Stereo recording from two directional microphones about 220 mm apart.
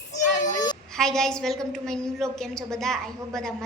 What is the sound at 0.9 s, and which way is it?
A woman's voice, centre (ahead or behind).